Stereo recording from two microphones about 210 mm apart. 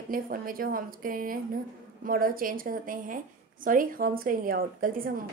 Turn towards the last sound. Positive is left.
turn(degrees=-45)  # may be behind; listen again after turning